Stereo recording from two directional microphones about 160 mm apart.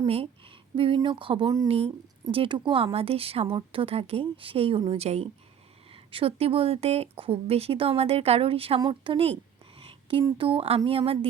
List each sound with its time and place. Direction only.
0.1 s a woman's voice: 35° right (ahead or behind)
9.7 s a sound: 35° right (ahead or behind)
10.3 s speech: 35° right (ahead or behind)